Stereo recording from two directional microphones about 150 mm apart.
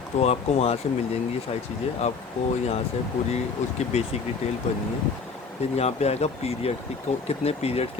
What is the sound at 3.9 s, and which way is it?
Speech, 45° left (ahead or behind).